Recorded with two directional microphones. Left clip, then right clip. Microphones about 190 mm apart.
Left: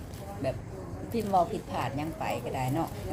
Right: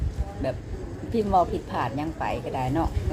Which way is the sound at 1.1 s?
10° right (ahead or behind).